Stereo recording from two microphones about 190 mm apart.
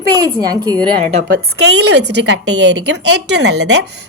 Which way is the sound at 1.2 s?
55° right (ahead or behind).